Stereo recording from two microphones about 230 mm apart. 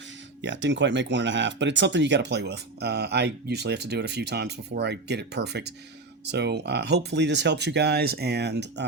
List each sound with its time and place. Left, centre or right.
0.4 s speech: right